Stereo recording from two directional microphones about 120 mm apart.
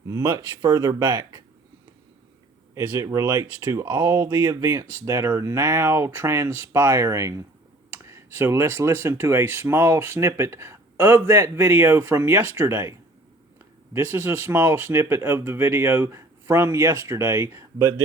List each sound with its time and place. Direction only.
0.1 s speech: 25° right (ahead or behind)
2.7 s speech: 20° right (ahead or behind)